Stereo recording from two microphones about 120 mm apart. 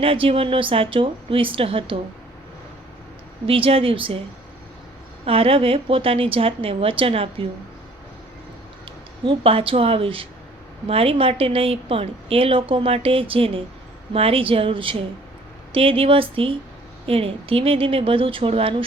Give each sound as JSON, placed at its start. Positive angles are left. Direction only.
{"t": 0.0, "sound": "a woman's voice", "side_deg": -50}
{"t": 3.4, "sound": "a woman's voice", "side_deg": -50}
{"t": 5.2, "sound": "a woman's voice", "side_deg": -55}
{"t": 9.2, "sound": "a woman's voice", "side_deg": -50}